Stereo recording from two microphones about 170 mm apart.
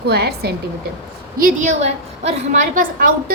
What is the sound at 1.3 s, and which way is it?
Speech, 55° right (ahead or behind).